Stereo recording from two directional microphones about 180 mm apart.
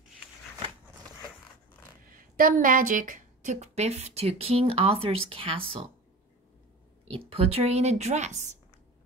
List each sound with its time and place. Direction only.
2.0 s a woman's voice: 50° right (ahead or behind); by 5.8 s 30° right (ahead or behind)
7.1 s a woman's voice: 35° right (ahead or behind)